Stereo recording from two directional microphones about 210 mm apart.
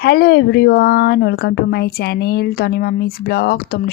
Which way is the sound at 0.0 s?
45° left (ahead or behind).